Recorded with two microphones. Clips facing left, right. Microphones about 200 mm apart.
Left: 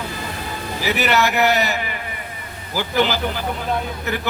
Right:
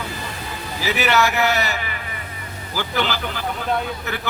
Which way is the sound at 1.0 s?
15° left (ahead or behind).